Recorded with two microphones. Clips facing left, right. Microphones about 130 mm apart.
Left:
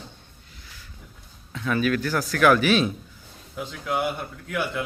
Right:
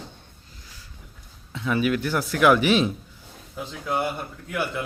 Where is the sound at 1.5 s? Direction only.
20° right (ahead or behind).